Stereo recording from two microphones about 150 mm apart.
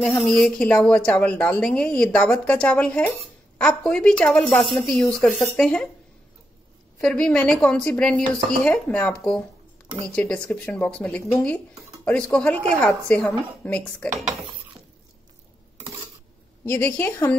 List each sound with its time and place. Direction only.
0.2 s speech: 5° left (ahead or behind)
7.0 s speech: 5° left (ahead or behind)
10.1 s speech: 5° left (ahead or behind)
16.6 s speech: 10° left (ahead or behind)